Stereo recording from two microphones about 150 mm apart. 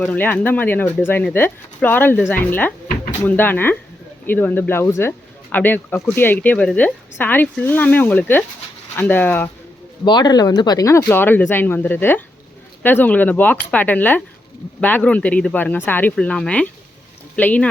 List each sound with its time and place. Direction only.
0.0 s speech: 10° left (ahead or behind)
10.0 s speech: 30° left (ahead or behind); by 17.7 s 10° left (ahead or behind)